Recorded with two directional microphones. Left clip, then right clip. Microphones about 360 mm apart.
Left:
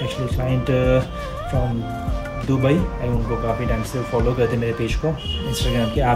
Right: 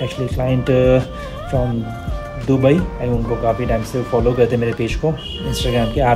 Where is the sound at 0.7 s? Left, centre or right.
Right.